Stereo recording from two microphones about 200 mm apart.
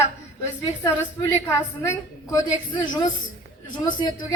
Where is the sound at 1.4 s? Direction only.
15° left (ahead or behind).